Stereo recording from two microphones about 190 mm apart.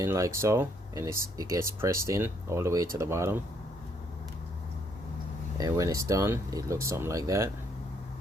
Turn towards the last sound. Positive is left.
turn(degrees=-15)  # may be behind; listen again after turning